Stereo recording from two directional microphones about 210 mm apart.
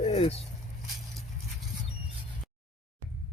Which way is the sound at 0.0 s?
30° left (ahead or behind).